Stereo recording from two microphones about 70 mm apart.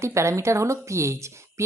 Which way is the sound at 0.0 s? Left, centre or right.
Right.